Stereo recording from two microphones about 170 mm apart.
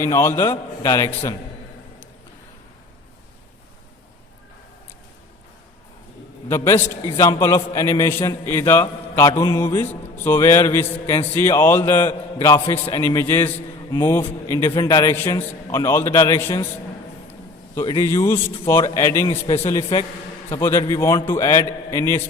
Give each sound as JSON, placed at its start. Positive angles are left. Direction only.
{"t": 0.0, "sound": "a man's voice", "side_deg": 15}
{"t": 6.8, "sound": "a man's voice", "side_deg": 15}
{"t": 12.6, "sound": "a man's voice", "side_deg": 30}
{"t": 13.0, "sound": "a man's voice", "side_deg": 15}
{"t": 17.7, "sound": "a man's voice", "side_deg": 20}